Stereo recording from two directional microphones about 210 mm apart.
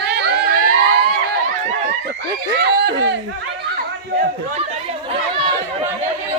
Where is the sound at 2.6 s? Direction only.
55° right (ahead or behind).